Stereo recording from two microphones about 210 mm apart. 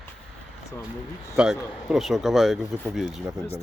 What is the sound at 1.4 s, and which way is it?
Speech, 5° right (ahead or behind).